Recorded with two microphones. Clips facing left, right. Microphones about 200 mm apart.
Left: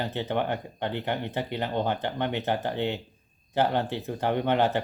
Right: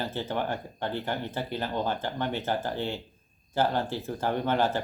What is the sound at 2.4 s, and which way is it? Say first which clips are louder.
Speech: left 2 dB; 20° left (ahead or behind).